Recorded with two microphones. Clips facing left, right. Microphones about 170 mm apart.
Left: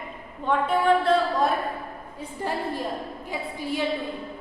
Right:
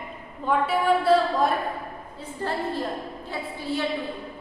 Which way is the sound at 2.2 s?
15° left (ahead or behind).